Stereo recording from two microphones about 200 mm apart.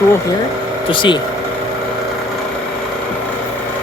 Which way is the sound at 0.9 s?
25° left (ahead or behind).